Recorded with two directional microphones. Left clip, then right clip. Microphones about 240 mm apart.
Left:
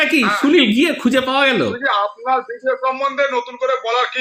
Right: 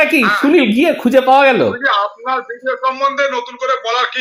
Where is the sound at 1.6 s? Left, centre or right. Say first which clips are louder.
Right 3 dB; centre.